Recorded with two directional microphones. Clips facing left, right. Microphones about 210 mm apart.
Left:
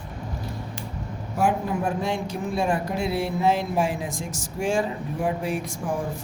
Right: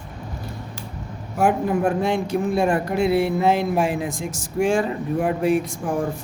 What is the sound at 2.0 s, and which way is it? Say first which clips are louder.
Speech: right 6 dB; 60° right (ahead or behind).